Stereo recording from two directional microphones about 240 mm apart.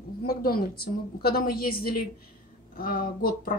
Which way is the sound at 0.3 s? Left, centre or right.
Left.